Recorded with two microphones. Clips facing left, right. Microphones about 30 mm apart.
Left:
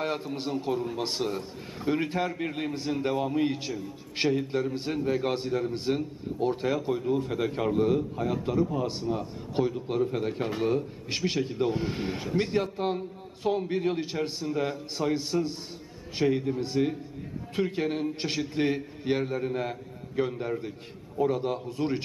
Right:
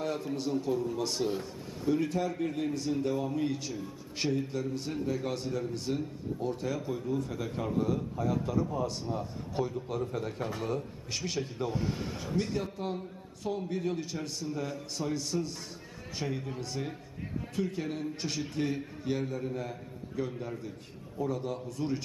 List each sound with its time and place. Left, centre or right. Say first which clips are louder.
0.0 s a man's voice: left 2 dB; left